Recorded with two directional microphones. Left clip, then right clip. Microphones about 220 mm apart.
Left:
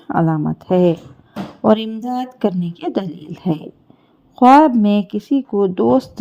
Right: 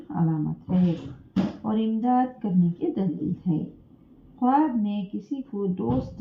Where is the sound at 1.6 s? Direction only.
50° left (ahead or behind).